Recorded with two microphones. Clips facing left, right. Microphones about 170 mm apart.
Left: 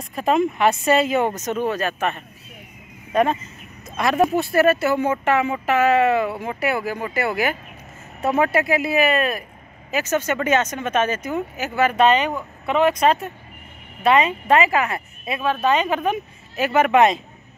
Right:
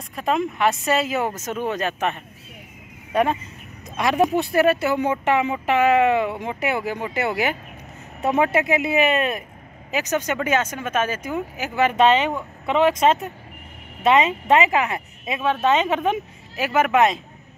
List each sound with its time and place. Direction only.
0.1 s speech: centre (ahead or behind); by 16.2 s 25° right (ahead or behind)
16.5 s speech: 10° right (ahead or behind)